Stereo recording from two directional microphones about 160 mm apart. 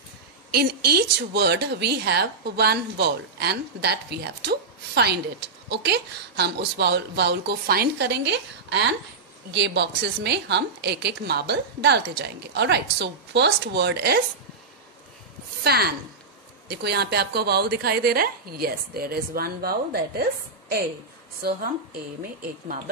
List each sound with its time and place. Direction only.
0.5 s speech: 75° right (ahead or behind)
15.6 s a woman's voice: 80° right